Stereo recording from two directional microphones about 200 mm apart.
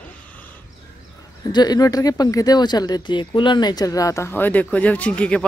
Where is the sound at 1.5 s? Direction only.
20° left (ahead or behind).